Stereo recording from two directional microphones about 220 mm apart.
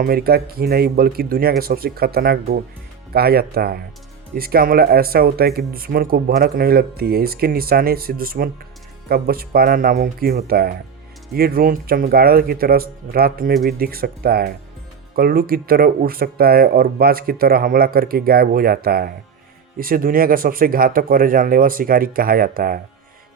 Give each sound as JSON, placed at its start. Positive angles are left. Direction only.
{"t": 0.0, "sound": "speech", "side_deg": -45}